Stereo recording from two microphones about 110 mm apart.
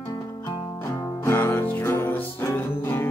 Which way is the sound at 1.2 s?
20° left (ahead or behind).